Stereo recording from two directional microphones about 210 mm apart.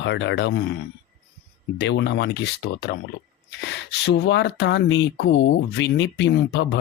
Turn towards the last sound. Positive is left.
turn(degrees=60)  # may be behind; listen again after turning